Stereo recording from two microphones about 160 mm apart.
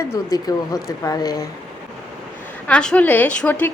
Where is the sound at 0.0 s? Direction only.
20° left (ahead or behind).